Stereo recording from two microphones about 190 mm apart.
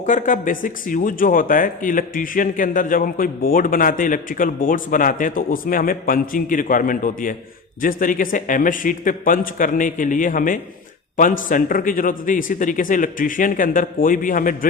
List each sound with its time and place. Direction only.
0.0 s speech: 40° left (ahead or behind)